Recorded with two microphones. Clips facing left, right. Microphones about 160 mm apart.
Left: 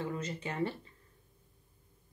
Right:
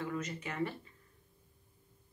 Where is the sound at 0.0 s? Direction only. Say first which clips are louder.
Left 1 dB; 30° left (ahead or behind).